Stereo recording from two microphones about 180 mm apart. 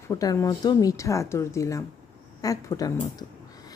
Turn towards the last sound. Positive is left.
turn(degrees=20)  # may be behind; listen again after turning